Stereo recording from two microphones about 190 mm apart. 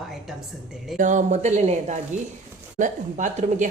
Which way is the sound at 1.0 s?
40° right (ahead or behind).